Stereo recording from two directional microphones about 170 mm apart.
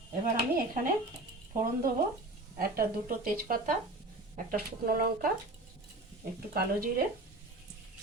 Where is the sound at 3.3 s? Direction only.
55° right (ahead or behind).